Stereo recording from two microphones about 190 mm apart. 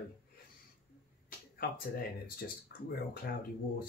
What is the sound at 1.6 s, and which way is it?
Speech, 50° left (ahead or behind).